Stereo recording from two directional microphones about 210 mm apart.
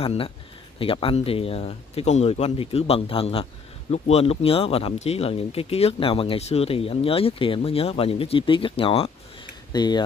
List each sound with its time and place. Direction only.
0.0 s speech: 25° left (ahead or behind)